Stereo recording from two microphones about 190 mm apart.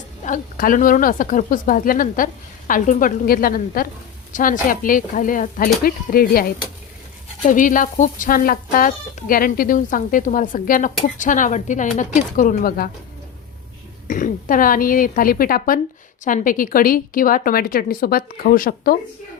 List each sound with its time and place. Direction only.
0.3 s speech: 45° left (ahead or behind)
7.4 s speech: 45° left (ahead or behind)
14.1 s speech: 45° left (ahead or behind)